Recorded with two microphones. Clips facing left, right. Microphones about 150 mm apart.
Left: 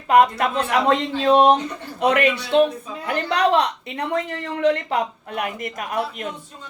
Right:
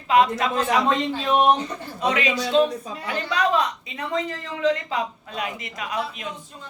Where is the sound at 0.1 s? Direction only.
55° left (ahead or behind); by 1.5 s 90° left.